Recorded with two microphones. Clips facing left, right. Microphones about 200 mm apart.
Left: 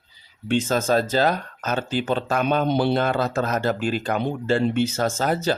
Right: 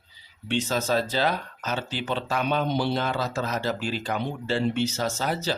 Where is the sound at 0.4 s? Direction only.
50° left (ahead or behind).